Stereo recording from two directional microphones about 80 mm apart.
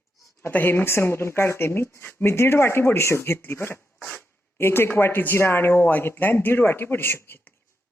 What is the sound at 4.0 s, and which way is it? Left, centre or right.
Speech, centre.